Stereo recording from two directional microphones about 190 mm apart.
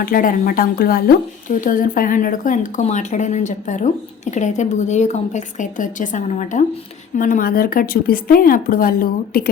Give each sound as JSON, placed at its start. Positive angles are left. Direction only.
{"t": 0.0, "sound": "a woman's voice", "side_deg": 50}